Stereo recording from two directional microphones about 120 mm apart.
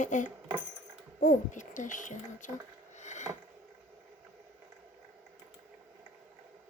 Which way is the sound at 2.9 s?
75° left (ahead or behind).